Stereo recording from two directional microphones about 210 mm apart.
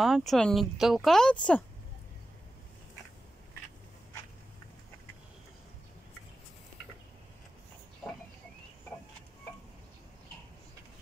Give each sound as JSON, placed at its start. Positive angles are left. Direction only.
{"t": 0.0, "sound": "speech", "side_deg": 0}